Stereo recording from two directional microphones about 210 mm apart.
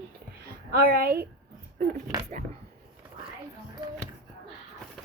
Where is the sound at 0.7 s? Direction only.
45° right (ahead or behind).